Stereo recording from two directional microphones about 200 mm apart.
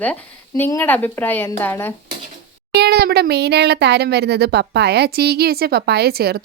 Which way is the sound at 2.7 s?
55° right (ahead or behind).